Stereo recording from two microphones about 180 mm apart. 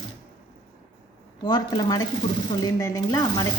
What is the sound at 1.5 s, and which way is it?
Speech, 25° left (ahead or behind).